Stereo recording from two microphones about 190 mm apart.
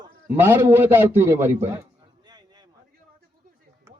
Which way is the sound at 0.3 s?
10° right (ahead or behind).